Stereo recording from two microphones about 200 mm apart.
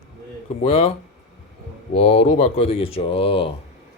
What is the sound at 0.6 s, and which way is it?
Speech, 30° left (ahead or behind).